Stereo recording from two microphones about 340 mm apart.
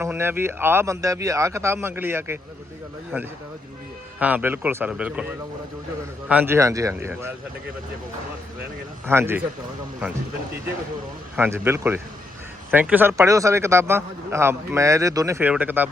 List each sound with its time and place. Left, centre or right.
0.0 s speech: centre
4.2 s speech: centre
6.2 s speech: centre
9.0 s speech: centre
11.3 s speech: centre